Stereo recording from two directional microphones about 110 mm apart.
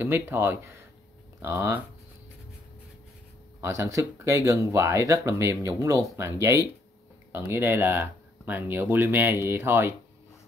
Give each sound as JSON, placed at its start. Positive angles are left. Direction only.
{"t": 0.0, "sound": "speech", "side_deg": -20}
{"t": 3.6, "sound": "speech", "side_deg": -25}